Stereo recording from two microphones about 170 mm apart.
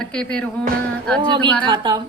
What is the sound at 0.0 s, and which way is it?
Speech, 5° left (ahead or behind).